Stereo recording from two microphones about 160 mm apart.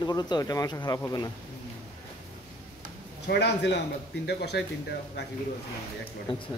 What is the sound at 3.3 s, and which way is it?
A man's voice, 90° left.